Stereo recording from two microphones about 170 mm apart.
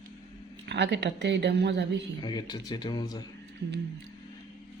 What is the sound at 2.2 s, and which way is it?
A man's voice, 25° left (ahead or behind).